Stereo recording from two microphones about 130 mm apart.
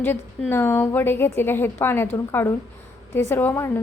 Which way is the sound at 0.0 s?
15° left (ahead or behind).